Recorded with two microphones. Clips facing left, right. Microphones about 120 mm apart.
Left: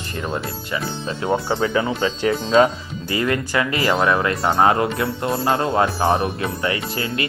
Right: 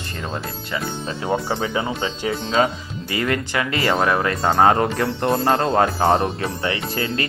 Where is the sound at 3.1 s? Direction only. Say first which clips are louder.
Left 1 dB; 30° left (ahead or behind).